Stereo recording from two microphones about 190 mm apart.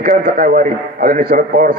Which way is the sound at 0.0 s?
45° right (ahead or behind).